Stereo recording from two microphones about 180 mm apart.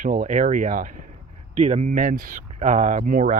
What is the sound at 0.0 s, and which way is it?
Speech, 50° right (ahead or behind).